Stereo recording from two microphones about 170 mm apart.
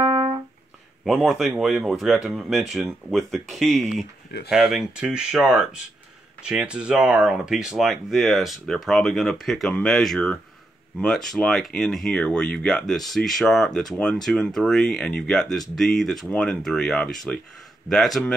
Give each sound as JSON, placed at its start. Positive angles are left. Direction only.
{"t": 0.0, "sound": "music", "side_deg": -30}
{"t": 1.0, "sound": "speech", "side_deg": -5}